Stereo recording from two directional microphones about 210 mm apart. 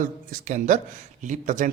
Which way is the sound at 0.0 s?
35° right (ahead or behind).